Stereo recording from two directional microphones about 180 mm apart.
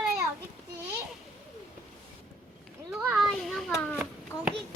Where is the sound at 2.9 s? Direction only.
5° right (ahead or behind).